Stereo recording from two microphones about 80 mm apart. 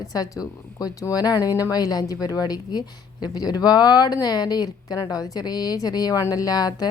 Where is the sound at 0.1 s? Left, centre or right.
Left.